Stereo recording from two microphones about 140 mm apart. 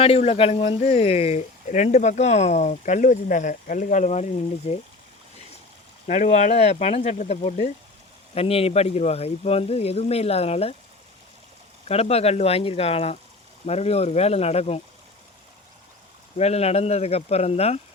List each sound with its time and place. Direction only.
0.0 s speech: 45° left (ahead or behind)
6.1 s speech: 55° left (ahead or behind)
8.4 s speech: 45° left (ahead or behind)
11.9 s speech: 45° left (ahead or behind)
16.4 s speech: 50° left (ahead or behind)